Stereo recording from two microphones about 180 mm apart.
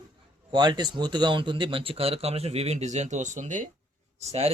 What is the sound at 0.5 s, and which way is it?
A man's voice, 25° right (ahead or behind).